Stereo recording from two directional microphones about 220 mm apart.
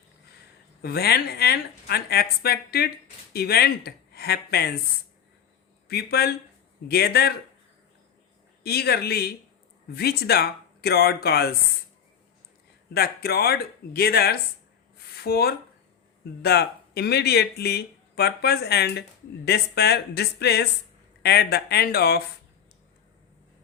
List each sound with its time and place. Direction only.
0.8 s speech: 45° left (ahead or behind)
5.9 s speech: 45° left (ahead or behind)
8.6 s speech: 45° left (ahead or behind)
12.9 s speech: 45° left (ahead or behind)